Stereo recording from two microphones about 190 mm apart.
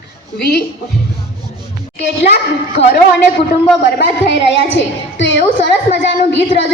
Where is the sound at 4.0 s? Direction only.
65° left (ahead or behind).